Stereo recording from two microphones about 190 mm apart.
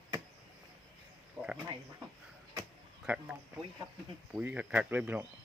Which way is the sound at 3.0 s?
5° right (ahead or behind).